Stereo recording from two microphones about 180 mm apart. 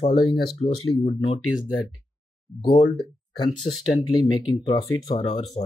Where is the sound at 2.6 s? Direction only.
25° left (ahead or behind).